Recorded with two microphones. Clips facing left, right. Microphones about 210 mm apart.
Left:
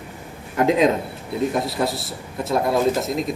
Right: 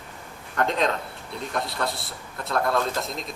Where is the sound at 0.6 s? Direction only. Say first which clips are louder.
Left 7 dB; 5° left (ahead or behind).